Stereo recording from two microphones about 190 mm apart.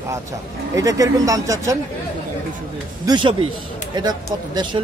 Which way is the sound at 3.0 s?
25° right (ahead or behind).